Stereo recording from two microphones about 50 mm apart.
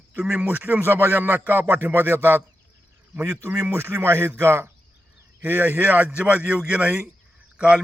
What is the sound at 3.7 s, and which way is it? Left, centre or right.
Speech, right.